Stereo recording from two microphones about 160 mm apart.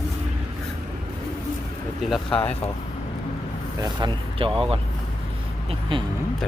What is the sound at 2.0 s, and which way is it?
Speech, centre (ahead or behind).